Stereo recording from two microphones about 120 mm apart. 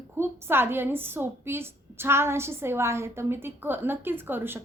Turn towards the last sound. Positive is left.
turn(degrees=-20)  # may be behind; listen again after turning